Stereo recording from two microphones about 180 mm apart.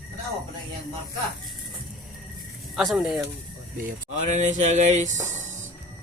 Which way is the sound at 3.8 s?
40° right (ahead or behind).